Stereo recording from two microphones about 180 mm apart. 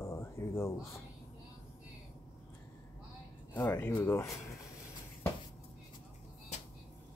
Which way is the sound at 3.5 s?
10° left (ahead or behind).